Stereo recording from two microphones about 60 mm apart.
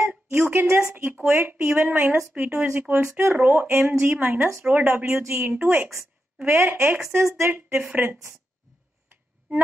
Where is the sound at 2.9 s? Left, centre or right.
Right.